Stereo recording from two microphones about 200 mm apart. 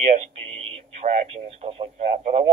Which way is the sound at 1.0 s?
30° right (ahead or behind).